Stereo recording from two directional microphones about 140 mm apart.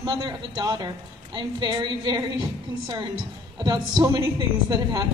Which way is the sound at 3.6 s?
30° right (ahead or behind).